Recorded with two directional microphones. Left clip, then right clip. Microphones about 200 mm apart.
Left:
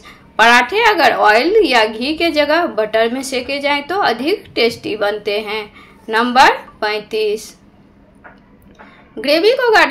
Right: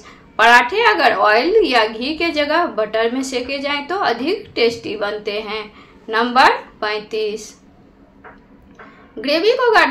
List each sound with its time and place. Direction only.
0.0 s a woman's voice: 30° left (ahead or behind)
9.2 s a woman's voice: 25° left (ahead or behind)